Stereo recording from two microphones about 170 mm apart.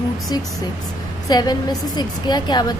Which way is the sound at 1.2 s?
25° left (ahead or behind).